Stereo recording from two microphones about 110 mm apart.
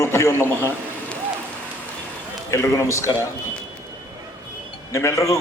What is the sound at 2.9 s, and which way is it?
Speech, 30° left (ahead or behind).